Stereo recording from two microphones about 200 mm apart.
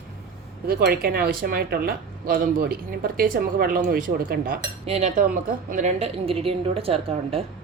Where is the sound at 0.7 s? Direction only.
50° right (ahead or behind).